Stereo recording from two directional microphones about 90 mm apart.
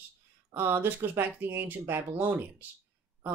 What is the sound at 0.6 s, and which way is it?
Speech, 25° right (ahead or behind).